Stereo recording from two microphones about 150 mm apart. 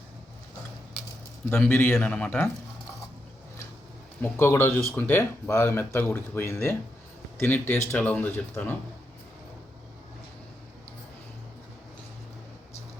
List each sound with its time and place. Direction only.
1.5 s speech: 10° left (ahead or behind)
4.2 s speech: 15° left (ahead or behind)